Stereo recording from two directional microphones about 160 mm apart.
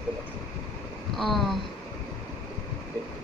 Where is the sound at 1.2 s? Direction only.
Centre (ahead or behind).